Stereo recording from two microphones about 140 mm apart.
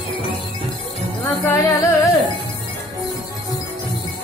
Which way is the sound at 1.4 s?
20° left (ahead or behind).